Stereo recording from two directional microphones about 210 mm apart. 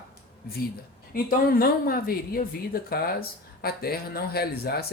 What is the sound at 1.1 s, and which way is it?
Speech, 45° left (ahead or behind).